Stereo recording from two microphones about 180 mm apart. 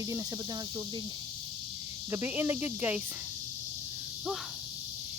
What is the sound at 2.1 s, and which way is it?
Speech, 10° right (ahead or behind).